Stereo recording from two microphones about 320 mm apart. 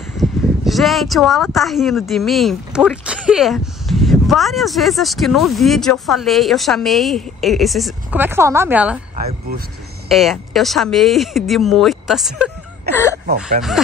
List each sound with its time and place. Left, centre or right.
0.2 s speech: centre
10.0 s speech: centre
12.8 s whimper: right
13.6 s speech: centre